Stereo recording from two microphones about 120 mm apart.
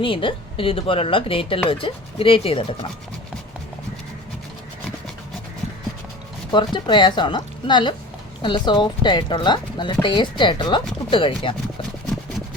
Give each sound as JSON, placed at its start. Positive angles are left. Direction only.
{"t": 0.0, "sound": "speech", "side_deg": 45}
{"t": 6.5, "sound": "speech", "side_deg": 40}